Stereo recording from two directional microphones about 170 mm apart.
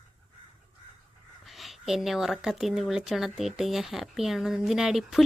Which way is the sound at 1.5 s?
Centre (ahead or behind).